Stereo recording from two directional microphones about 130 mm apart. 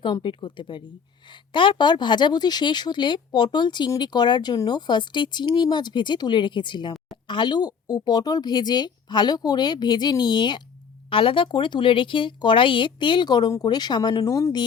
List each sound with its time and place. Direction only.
0.0 s speech: 40° left (ahead or behind)